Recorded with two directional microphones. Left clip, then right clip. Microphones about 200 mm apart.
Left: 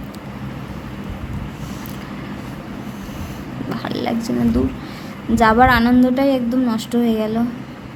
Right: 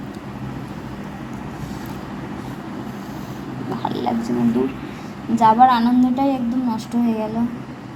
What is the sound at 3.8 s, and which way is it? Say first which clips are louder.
Speech: right 1 dB; 30° left (ahead or behind).